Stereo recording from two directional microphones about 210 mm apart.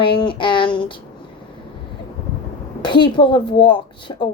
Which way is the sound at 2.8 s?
20° left (ahead or behind).